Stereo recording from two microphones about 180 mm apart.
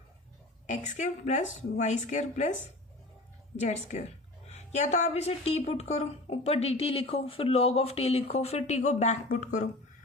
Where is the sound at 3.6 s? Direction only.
40° left (ahead or behind).